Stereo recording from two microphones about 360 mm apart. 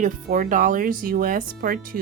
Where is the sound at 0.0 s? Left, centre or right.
Right.